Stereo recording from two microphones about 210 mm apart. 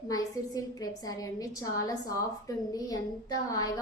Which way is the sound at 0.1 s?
15° left (ahead or behind).